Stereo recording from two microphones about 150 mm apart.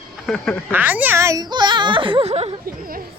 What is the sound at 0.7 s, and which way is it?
A child's voice, 10° right (ahead or behind).